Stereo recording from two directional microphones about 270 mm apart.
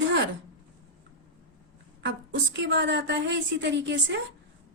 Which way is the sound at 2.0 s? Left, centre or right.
Right.